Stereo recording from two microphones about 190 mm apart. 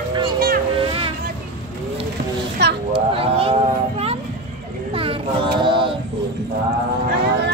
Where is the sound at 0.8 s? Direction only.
25° right (ahead or behind).